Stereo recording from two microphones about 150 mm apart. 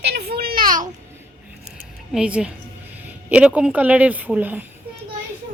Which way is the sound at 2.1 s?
5° right (ahead or behind).